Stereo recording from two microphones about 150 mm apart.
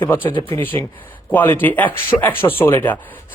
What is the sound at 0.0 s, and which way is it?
Speech, 15° left (ahead or behind).